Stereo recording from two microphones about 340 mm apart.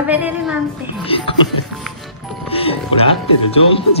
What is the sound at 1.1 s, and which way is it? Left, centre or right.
Speech, centre.